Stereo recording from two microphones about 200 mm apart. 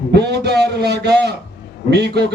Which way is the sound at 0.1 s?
55° right (ahead or behind).